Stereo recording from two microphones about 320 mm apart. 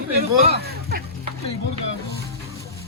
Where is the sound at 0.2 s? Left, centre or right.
Right.